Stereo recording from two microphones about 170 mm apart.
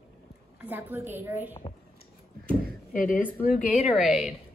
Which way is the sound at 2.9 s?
50° left (ahead or behind).